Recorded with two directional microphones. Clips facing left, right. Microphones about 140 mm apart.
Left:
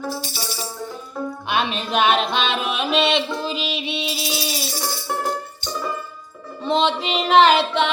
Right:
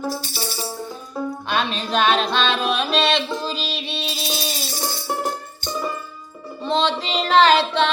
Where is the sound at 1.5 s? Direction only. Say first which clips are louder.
Left 2 dB; 20° left (ahead or behind).